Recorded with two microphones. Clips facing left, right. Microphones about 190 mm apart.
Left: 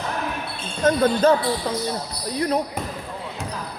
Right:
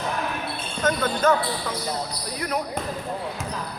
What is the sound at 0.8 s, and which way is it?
Speech, 30° left (ahead or behind).